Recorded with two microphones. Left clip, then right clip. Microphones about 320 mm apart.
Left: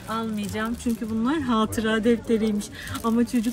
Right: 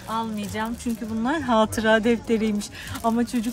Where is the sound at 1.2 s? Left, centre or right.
Centre.